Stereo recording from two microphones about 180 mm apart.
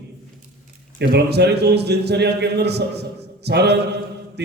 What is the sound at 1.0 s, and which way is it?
A man's voice, 65° right (ahead or behind).